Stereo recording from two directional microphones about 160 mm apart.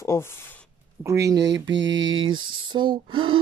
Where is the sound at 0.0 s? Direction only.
15° left (ahead or behind).